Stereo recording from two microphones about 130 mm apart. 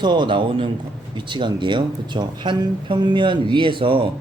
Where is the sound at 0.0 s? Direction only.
35° right (ahead or behind).